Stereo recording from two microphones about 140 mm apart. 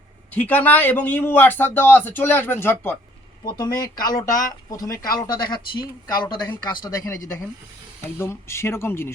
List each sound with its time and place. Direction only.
0.3 s a man's voice: 10° left (ahead or behind)
3.4 s a man's voice: 30° left (ahead or behind)